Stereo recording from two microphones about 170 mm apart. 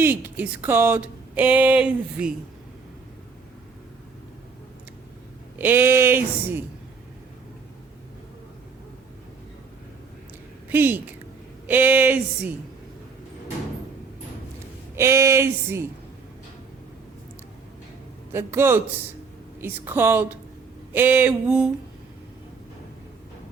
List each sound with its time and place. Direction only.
0.0 s speech: 10° right (ahead or behind)
5.5 s speech: 10° right (ahead or behind)
10.7 s speech: 10° right (ahead or behind)
14.9 s speech: 15° right (ahead or behind)
18.3 s speech: 15° right (ahead or behind)